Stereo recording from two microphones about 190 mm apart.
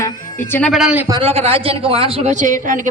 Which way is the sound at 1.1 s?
30° right (ahead or behind).